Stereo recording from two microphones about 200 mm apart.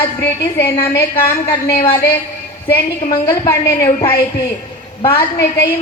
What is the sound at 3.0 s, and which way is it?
A woman's voice, 20° left (ahead or behind).